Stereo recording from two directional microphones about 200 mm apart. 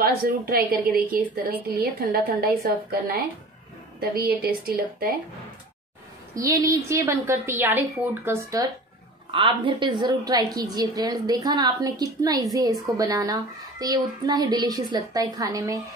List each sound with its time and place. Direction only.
0.0 s a woman's voice: 50° right (ahead or behind)
6.3 s a woman's voice: 15° right (ahead or behind)
9.3 s a child's voice: 25° right (ahead or behind)